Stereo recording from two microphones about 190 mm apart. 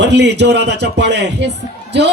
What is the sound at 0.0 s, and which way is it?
A man's voice, 65° right (ahead or behind).